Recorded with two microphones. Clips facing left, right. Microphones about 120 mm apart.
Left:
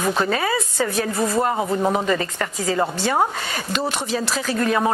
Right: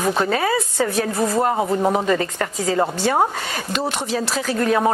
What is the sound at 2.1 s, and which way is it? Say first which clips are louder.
Speech: right 2 dB; 35° right (ahead or behind).